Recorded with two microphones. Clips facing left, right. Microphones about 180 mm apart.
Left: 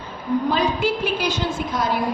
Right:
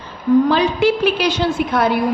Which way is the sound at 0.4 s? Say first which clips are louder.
Right 6 dB; 85° right.